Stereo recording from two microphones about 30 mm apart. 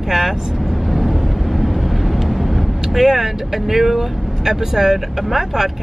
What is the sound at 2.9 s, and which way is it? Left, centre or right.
Speech, centre.